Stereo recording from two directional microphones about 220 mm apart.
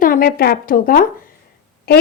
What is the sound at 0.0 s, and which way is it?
A woman's voice, 40° left (ahead or behind).